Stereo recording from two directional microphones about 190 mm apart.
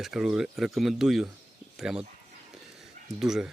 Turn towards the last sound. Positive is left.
turn(degrees=0)  # may be behind; listen again after turning